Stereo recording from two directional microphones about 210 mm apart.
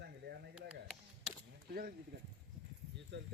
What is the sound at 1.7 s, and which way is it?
Speech, 45° right (ahead or behind).